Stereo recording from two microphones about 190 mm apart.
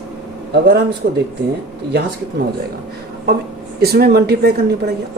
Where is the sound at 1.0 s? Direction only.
60° right (ahead or behind).